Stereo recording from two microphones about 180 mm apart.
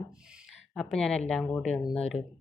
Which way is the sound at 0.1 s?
5° right (ahead or behind).